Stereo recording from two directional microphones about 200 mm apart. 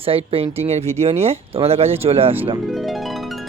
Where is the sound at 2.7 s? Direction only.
Centre (ahead or behind).